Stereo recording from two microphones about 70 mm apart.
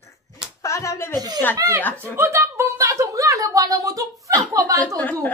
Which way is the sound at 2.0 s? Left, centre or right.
Right.